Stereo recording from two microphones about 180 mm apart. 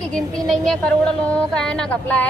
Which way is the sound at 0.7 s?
5° left (ahead or behind).